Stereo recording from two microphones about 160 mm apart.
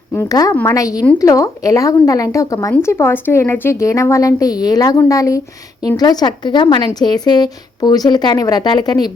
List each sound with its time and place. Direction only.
0.1 s a woman's voice: 20° left (ahead or behind)